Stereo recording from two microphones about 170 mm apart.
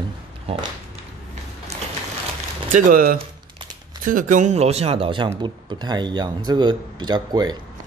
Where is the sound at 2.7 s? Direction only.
50° right (ahead or behind); by 7.5 s 25° right (ahead or behind).